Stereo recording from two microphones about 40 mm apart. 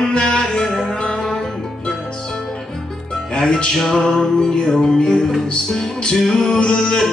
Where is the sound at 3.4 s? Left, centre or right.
Centre.